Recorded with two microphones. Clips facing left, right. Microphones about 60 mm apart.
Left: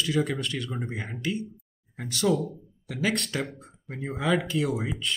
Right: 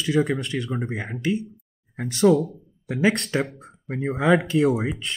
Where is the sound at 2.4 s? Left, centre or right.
Right.